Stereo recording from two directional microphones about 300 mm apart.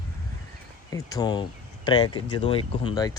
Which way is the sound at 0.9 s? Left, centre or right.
Centre.